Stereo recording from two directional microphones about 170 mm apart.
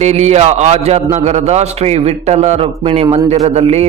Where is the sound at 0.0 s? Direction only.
40° right (ahead or behind).